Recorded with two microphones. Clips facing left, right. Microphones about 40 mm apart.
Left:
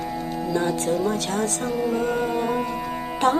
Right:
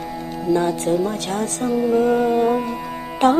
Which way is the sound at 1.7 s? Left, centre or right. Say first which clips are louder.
Right 7 dB; centre.